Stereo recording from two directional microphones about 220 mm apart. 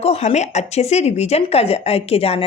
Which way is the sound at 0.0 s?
30° left (ahead or behind).